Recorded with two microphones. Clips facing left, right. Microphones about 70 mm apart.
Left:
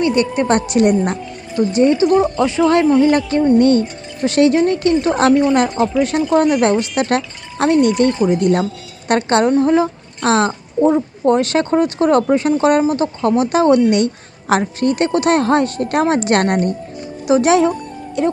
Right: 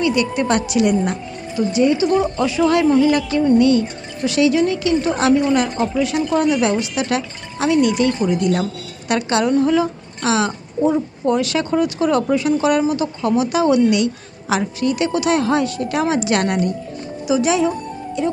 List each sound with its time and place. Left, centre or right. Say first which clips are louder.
0.0 s a woman's voice: left 2 dB; left